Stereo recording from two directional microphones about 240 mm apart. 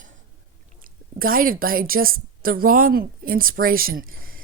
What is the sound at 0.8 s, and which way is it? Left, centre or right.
A woman's voice, right.